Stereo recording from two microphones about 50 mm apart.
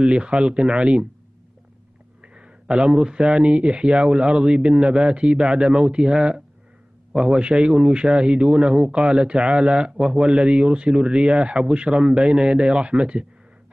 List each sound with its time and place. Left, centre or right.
0.0 s speech: right
2.2 s speech: right